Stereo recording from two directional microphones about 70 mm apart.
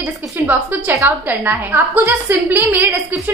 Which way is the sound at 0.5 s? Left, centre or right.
Right.